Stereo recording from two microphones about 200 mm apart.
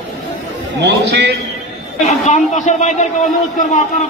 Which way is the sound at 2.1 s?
35° left (ahead or behind).